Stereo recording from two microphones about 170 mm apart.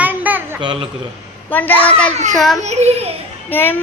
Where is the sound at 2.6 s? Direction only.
40° right (ahead or behind).